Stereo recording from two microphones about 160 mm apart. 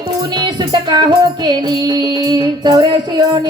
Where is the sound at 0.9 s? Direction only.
25° right (ahead or behind).